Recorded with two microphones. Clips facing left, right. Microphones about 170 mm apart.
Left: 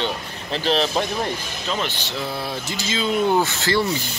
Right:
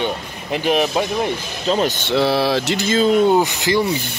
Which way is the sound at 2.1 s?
85° right.